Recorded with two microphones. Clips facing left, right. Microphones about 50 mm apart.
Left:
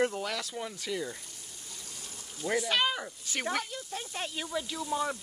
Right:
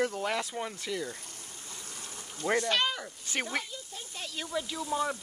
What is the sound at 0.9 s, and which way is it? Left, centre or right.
Speech, centre.